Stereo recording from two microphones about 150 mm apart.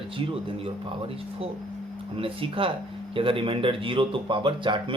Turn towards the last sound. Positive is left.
turn(degrees=-35)  # may be behind; listen again after turning